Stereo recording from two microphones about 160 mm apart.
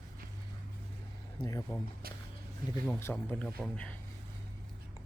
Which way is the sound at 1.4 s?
20° left (ahead or behind).